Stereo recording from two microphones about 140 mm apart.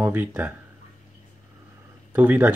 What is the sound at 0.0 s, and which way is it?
Speech, 15° right (ahead or behind).